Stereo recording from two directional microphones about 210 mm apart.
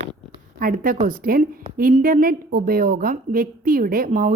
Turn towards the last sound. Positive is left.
turn(degrees=-40)  # may be behind; listen again after turning